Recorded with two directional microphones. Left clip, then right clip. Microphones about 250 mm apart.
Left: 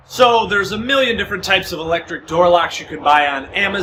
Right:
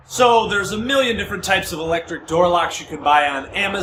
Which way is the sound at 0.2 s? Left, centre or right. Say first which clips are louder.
Left 2 dB; centre.